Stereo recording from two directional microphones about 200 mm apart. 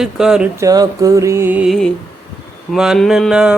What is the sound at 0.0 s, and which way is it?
Speech, 5° right (ahead or behind).